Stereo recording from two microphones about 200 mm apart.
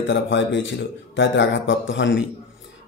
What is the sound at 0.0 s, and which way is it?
Speech, 65° left (ahead or behind).